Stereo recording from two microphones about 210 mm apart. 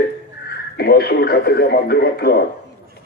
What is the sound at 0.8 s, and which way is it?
Speech, 50° left (ahead or behind).